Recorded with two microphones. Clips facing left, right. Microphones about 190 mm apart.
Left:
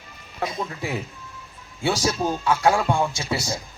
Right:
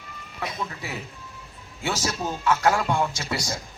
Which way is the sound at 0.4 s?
30° left (ahead or behind).